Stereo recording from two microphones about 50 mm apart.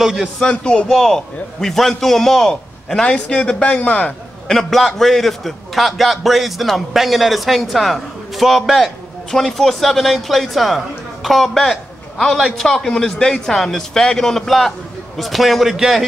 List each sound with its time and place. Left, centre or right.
0.0 s music: centre
0.4 s a man's voice: centre
4.5 s a man's voice: centre